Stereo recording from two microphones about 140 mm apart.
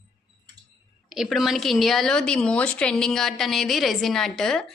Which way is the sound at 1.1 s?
Centre (ahead or behind).